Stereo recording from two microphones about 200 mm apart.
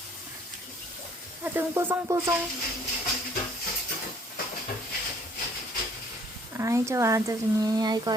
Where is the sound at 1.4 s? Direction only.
10° right (ahead or behind).